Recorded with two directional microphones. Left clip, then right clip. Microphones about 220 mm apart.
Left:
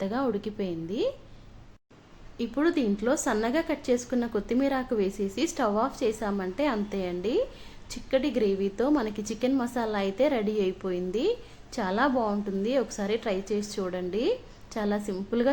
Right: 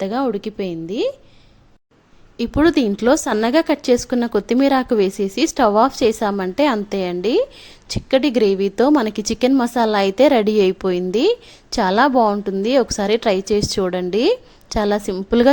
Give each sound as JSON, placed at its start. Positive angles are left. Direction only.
{"t": 0.0, "sound": "a woman's voice", "side_deg": -40}
{"t": 2.4, "sound": "a woman's voice", "side_deg": -45}